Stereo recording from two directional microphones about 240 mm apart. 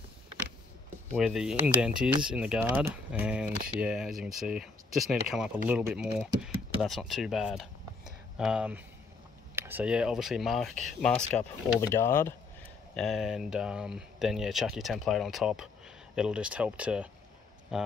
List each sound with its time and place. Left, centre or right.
1.1 s speech: centre
12.9 s speech: centre